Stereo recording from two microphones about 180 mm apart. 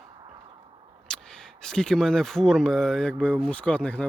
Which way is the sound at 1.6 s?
5° left (ahead or behind).